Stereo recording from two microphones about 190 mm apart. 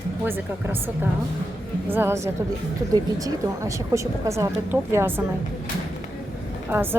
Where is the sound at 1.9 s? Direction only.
10° right (ahead or behind).